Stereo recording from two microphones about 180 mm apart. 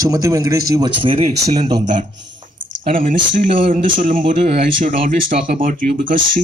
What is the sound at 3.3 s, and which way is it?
A man's voice, 45° right (ahead or behind).